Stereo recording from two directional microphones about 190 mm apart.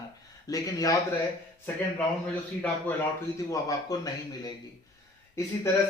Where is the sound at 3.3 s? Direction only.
15° left (ahead or behind).